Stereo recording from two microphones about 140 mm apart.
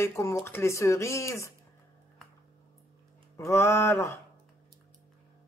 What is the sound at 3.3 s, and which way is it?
Speech, 20° left (ahead or behind).